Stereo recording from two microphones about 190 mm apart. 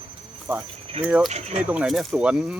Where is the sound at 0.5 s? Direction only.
15° right (ahead or behind).